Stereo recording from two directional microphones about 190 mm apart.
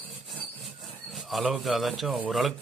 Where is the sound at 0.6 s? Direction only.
Centre (ahead or behind).